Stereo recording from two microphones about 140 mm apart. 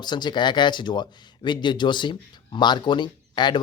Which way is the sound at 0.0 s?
30° left (ahead or behind).